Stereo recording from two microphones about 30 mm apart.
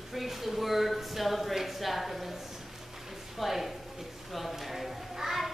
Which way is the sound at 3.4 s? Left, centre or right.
Centre.